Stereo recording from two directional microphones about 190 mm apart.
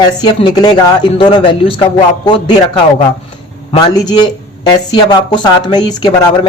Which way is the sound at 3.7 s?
20° left (ahead or behind).